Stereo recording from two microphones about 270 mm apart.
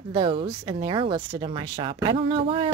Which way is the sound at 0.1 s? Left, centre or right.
Centre.